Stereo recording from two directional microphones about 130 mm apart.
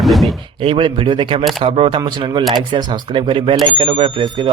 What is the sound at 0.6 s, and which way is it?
Speech, 40° right (ahead or behind).